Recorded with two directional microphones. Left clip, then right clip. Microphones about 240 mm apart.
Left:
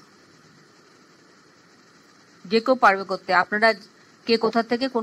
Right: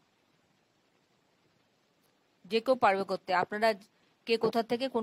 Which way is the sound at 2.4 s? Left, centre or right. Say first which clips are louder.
Left 9 dB; right.